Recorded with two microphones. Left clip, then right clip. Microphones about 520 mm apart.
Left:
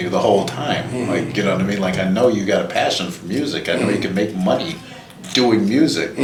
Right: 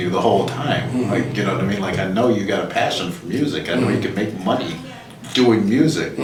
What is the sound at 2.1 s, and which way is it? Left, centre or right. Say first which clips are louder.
Speech: left 3 dB; left.